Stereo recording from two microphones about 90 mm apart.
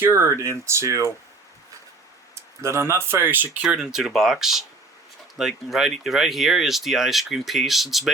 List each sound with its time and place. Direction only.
0.0 s speech: 30° right (ahead or behind)
2.6 s speech: 30° right (ahead or behind); by 8.1 s 5° right (ahead or behind)